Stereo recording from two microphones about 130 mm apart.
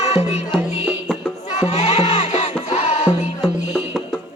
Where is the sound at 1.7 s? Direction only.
60° left (ahead or behind).